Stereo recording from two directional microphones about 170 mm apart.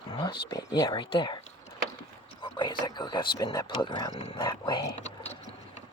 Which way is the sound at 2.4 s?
25° left (ahead or behind).